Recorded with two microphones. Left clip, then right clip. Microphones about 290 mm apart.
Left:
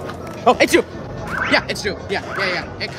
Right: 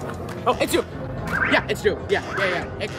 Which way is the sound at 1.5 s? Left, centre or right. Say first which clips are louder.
Left 3 dB; left.